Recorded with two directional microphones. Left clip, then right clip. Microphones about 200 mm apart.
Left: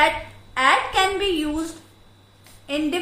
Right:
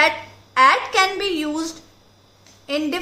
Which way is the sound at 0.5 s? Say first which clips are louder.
Right 3 dB; 35° right (ahead or behind).